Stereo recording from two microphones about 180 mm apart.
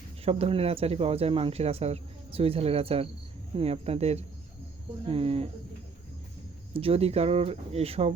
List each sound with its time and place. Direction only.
0.3 s speech: 35° right (ahead or behind)
6.7 s speech: 30° right (ahead or behind)